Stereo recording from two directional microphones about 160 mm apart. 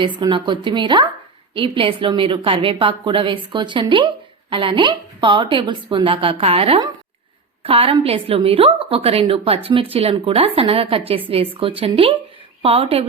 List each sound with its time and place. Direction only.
0.0 s a woman's voice: 30° right (ahead or behind)